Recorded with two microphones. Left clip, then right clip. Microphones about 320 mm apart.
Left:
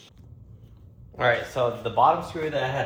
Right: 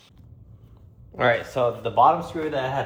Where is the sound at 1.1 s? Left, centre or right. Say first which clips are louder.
Right 2 dB; right.